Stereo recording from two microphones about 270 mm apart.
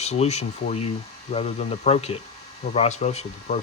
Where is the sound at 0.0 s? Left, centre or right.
Left.